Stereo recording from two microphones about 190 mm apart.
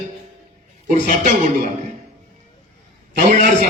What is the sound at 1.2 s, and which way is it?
Speech, 45° right (ahead or behind).